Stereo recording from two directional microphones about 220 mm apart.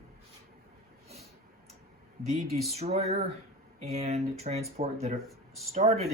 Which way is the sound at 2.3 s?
30° right (ahead or behind).